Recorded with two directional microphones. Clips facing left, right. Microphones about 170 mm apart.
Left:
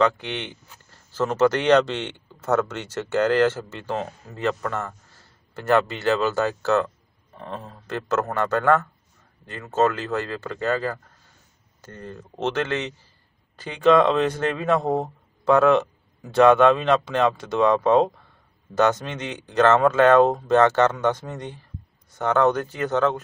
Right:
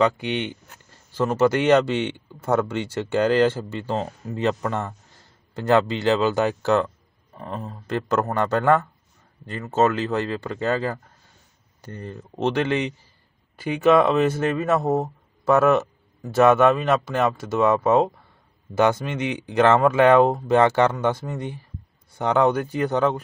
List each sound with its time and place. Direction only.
0.0 s speech: 10° right (ahead or behind)